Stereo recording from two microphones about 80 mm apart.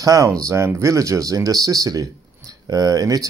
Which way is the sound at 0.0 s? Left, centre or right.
Right.